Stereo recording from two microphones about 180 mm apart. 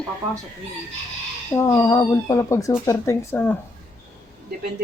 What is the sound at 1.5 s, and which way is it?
Speech, 15° left (ahead or behind).